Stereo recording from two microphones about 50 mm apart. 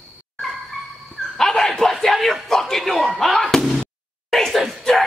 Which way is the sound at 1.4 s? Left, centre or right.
Centre.